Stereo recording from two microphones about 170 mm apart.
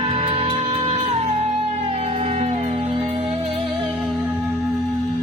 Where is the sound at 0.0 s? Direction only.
35° right (ahead or behind).